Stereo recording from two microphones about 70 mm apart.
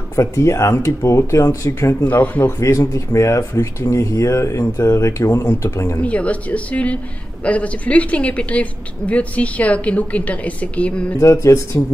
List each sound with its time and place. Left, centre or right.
0.1 s speech: left
2.0 s a woman's voice: left
2.6 s speech: left
6.0 s a woman's voice: centre
11.1 s speech: left